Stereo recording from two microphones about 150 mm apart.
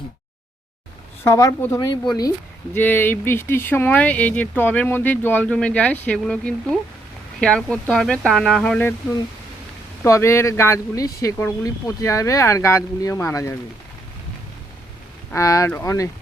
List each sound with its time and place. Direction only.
1.2 s speech: 20° left (ahead or behind)
10.0 s speech: 20° left (ahead or behind)
15.3 s speech: 20° left (ahead or behind)